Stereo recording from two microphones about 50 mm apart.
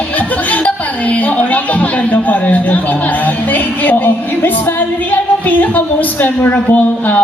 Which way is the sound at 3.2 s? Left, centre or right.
Left.